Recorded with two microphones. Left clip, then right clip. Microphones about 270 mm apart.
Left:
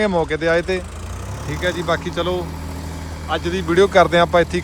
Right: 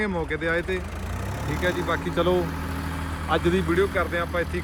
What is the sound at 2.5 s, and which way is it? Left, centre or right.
Vehicle, right.